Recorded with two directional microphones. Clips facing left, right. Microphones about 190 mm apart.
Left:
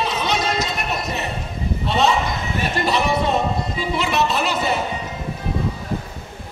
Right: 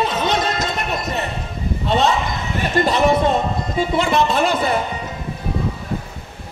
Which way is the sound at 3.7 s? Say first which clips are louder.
Right 7 dB; 50° right (ahead or behind).